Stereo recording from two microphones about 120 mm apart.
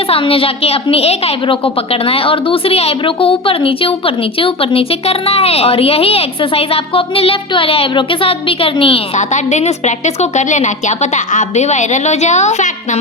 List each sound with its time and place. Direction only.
0.1 s a woman's voice: 50° left (ahead or behind)
9.1 s a woman's voice: 75° left (ahead or behind)